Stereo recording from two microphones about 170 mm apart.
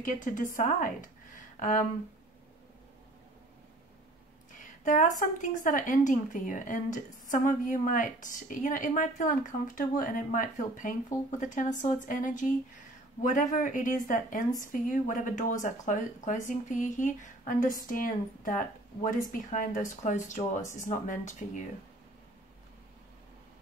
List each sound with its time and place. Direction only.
0.0 s speech: 50° left (ahead or behind)
4.8 s a woman's voice: 50° left (ahead or behind)